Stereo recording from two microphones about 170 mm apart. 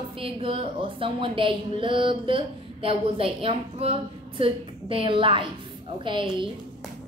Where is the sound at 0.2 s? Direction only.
35° right (ahead or behind).